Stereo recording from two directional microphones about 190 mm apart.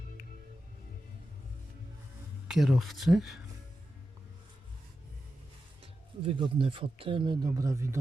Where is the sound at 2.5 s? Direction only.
Centre (ahead or behind).